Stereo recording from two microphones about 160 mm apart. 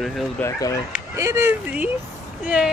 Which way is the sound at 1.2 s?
15° right (ahead or behind).